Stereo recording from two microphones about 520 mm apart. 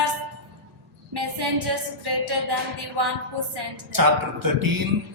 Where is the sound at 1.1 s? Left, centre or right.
Right.